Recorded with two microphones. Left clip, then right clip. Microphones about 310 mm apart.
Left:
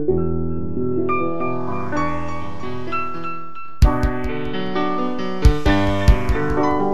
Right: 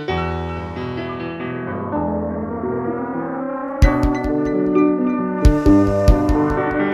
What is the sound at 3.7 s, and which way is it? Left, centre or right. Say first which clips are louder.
Music: right 2 dB; centre.